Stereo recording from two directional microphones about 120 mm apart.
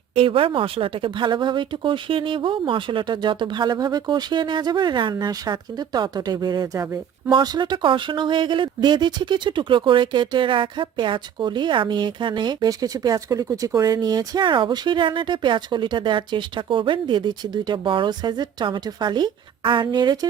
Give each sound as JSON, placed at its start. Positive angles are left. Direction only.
{"t": 0.1, "sound": "speech", "side_deg": -50}